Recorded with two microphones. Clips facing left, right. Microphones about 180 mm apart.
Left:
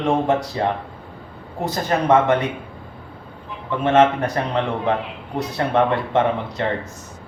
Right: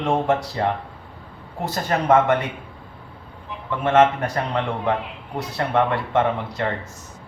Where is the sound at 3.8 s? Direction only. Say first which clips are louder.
Left 1 dB; 20° left (ahead or behind).